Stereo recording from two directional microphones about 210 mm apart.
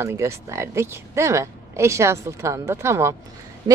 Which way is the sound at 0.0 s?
15° right (ahead or behind).